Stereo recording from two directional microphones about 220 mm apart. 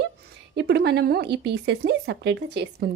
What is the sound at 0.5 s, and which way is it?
A woman's voice, 50° right (ahead or behind).